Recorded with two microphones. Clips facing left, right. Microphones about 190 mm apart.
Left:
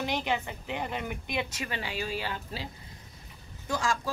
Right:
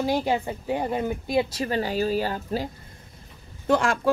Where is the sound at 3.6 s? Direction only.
60° right (ahead or behind).